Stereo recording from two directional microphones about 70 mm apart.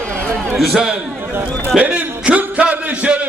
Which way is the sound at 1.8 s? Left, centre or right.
Centre.